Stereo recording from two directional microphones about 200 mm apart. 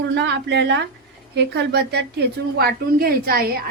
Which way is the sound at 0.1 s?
60° right (ahead or behind).